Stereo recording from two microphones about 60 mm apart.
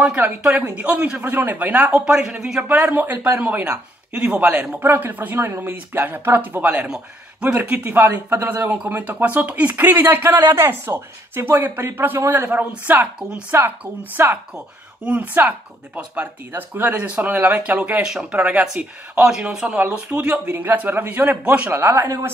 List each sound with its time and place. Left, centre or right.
0.6 s speech: right
1.2 s speech: right
2.0 s speech: centre
2.9 s speech: right
4.7 s speech: right
12.4 s speech: right
13.5 s speech: right
14.1 s speech: right
21.7 s speech: right